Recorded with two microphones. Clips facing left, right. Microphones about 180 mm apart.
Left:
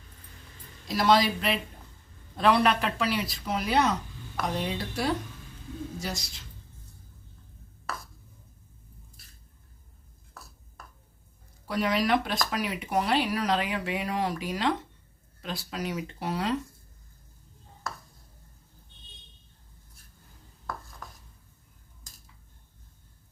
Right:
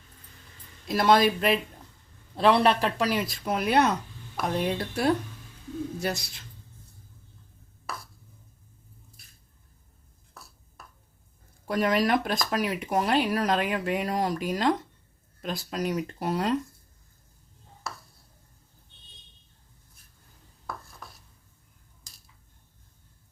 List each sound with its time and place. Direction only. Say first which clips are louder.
0.9 s speech: right 2 dB; 55° right (ahead or behind)
2.3 s speech: right 2 dB; 25° right (ahead or behind); by 6.4 s 60° right (ahead or behind)
11.7 s speech: right 2 dB; 50° right (ahead or behind)